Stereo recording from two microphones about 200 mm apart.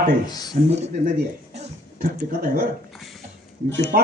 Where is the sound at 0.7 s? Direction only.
35° right (ahead or behind).